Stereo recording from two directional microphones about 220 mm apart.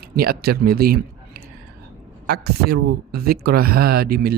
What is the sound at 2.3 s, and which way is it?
Speech, 45° right (ahead or behind).